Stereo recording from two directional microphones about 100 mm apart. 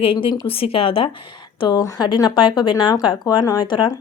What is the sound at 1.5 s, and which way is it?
Speech, 45° left (ahead or behind).